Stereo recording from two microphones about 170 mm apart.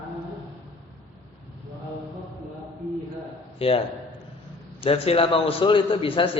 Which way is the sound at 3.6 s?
35° left (ahead or behind).